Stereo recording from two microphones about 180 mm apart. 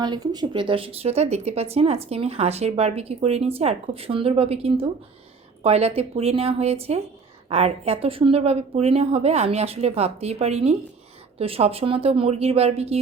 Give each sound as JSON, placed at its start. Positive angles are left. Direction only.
{"t": 0.0, "sound": "speech", "side_deg": -20}